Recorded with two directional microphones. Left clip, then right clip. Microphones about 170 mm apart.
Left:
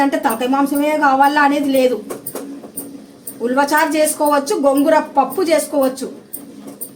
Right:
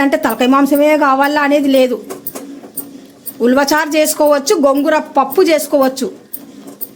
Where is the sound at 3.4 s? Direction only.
70° right (ahead or behind).